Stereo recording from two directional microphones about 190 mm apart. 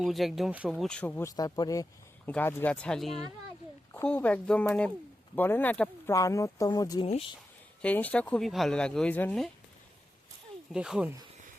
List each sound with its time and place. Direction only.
0.0 s speech: centre (ahead or behind); by 7.3 s 30° left (ahead or behind)
7.8 s speech: 10° left (ahead or behind)
10.7 s speech: 5° right (ahead or behind)